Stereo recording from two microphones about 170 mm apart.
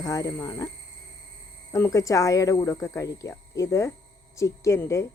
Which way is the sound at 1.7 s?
15° left (ahead or behind).